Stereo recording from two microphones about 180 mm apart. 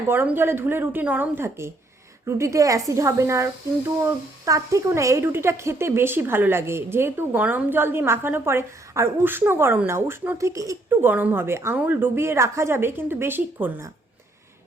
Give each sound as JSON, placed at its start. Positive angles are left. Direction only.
{"t": 0.1, "sound": "speech", "side_deg": -10}